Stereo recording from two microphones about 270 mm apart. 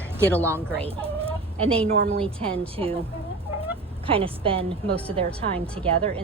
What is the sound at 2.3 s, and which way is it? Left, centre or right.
Speech, right.